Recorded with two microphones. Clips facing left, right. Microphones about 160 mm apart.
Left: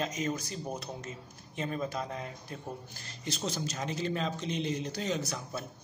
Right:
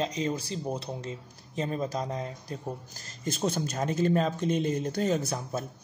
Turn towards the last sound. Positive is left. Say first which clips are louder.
# right 5 dB
turn(degrees=-45)  # may be behind; listen again after turning